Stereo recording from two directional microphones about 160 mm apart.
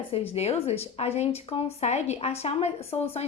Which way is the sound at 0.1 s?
40° left (ahead or behind).